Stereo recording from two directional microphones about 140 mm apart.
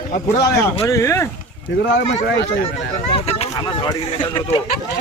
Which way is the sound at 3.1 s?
45° left (ahead or behind).